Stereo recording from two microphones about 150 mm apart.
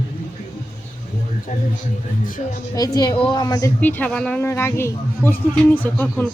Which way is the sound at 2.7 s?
25° left (ahead or behind).